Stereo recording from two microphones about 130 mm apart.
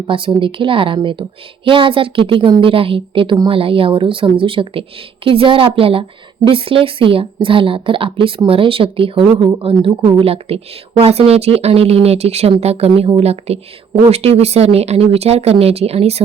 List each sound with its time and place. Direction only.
0.1 s a woman's voice: 40° right (ahead or behind)